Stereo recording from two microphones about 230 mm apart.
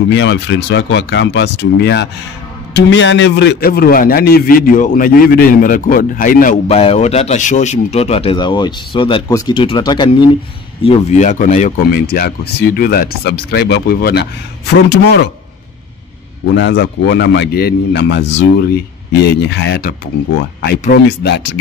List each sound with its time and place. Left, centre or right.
0.1 s a man's voice: left
16.5 s a man's voice: left